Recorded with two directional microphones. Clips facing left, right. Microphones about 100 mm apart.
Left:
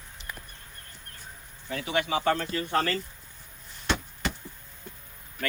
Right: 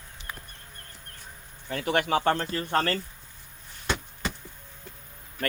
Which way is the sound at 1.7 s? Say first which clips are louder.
Right 3 dB; 50° right (ahead or behind).